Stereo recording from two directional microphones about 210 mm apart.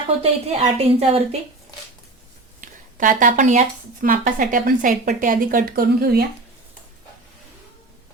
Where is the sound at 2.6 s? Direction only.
40° right (ahead or behind).